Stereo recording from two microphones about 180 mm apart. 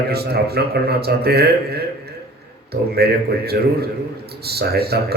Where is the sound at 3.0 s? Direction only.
60° right (ahead or behind).